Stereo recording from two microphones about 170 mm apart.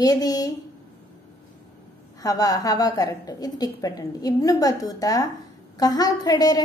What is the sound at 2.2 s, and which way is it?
A woman's voice, 20° left (ahead or behind).